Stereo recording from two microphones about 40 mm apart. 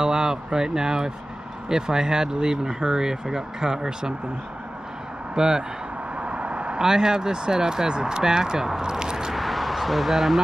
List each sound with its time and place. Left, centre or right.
0.0 s speech: centre
5.3 s speech: centre
6.1 s vehicle: right
6.8 s speech: centre
9.3 s a sound: centre